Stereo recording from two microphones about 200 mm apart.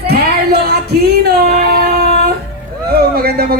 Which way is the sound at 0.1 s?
50° right (ahead or behind).